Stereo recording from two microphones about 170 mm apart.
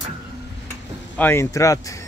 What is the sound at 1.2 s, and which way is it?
Speech, 15° left (ahead or behind).